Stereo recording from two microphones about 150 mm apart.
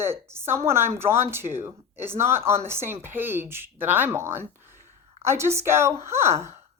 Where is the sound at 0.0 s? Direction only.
15° right (ahead or behind).